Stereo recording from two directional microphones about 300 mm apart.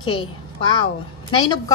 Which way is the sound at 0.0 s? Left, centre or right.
Centre.